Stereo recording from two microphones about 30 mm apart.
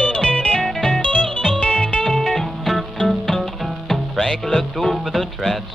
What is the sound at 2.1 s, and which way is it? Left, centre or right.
Music, centre.